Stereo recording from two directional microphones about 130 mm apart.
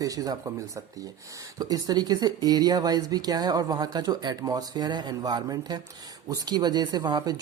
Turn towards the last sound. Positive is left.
turn(degrees=-30)  # may be behind; listen again after turning